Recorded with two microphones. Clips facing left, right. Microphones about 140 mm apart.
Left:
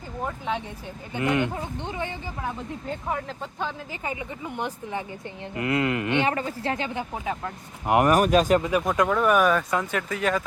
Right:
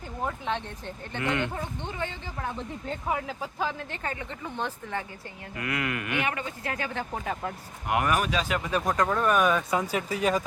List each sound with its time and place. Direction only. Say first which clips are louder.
0.3 s speech: left 1 dB; centre (ahead or behind)
1.1 s speech: left 5 dB; 20° left (ahead or behind)
2.9 s speech: even; 5° right (ahead or behind)
4.0 s speech: left 4 dB; 10° left (ahead or behind)
5.5 s speech: left 7 dB; 25° left (ahead or behind)
7.1 s speech: left 1 dB; centre (ahead or behind)
7.9 s speech: left 7 dB; 35° left (ahead or behind)
8.8 s speech: left 3 dB; centre (ahead or behind)
9.9 s speech: even; 15° right (ahead or behind)